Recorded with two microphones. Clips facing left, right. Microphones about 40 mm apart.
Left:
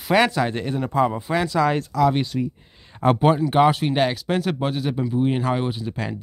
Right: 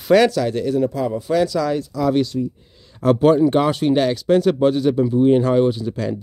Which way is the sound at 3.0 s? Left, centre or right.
Centre.